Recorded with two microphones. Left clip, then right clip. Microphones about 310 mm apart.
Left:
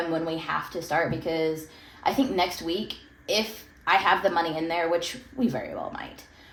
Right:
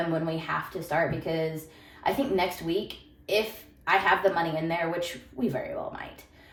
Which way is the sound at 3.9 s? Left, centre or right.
Left.